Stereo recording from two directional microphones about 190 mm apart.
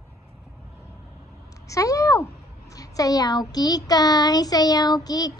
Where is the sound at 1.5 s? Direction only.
15° left (ahead or behind).